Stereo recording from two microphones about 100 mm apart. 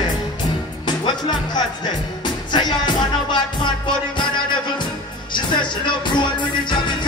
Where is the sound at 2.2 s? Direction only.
50° left (ahead or behind).